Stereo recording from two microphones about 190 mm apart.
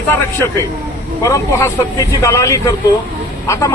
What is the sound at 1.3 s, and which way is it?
A man's voice, 15° left (ahead or behind).